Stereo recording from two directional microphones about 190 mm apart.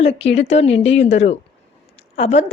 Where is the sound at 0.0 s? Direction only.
30° left (ahead or behind).